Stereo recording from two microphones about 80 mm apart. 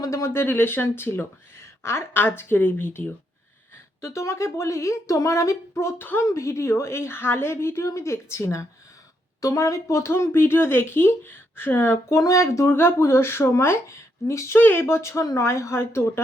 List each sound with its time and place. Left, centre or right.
0.0 s speech: left
0.4 s speech: left
4.0 s speech: left
12.2 s speech: left
12.6 s speech: left